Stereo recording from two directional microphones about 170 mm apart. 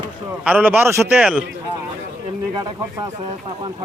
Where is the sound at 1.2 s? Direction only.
5° right (ahead or behind).